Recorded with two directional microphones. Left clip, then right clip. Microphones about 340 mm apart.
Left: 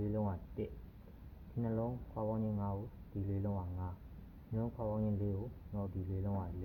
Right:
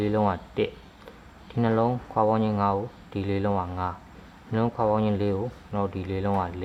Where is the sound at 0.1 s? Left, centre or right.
Right.